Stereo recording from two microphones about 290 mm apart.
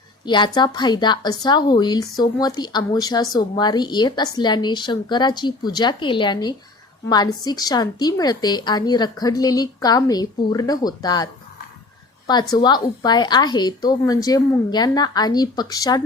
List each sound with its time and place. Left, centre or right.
0.3 s speech: centre
12.3 s speech: centre